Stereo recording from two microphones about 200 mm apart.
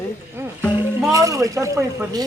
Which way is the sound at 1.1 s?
15° right (ahead or behind).